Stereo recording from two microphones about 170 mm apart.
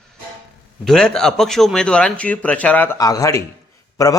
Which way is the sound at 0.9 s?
5° left (ahead or behind).